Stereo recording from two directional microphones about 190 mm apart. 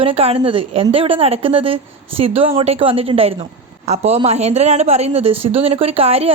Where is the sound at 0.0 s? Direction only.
30° right (ahead or behind).